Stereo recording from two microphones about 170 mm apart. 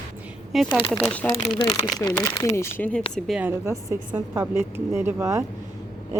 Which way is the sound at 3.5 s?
15° right (ahead or behind).